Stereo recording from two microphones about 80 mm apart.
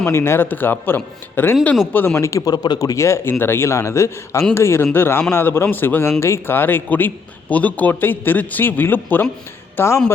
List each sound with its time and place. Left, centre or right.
0.0 s a man's voice: left
2.5 s a man's voice: left